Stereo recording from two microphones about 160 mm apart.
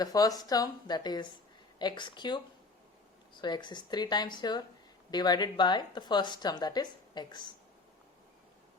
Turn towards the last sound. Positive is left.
turn(degrees=30)  # may be behind; listen again after turning